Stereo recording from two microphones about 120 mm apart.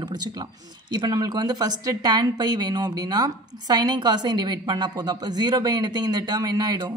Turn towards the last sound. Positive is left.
turn(degrees=-35)  # may be behind; listen again after turning